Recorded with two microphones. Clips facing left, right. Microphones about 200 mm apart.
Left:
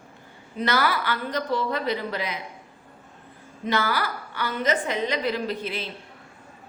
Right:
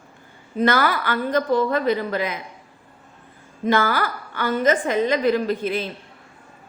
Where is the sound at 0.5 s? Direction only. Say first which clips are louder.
Right 5 dB; 50° right (ahead or behind).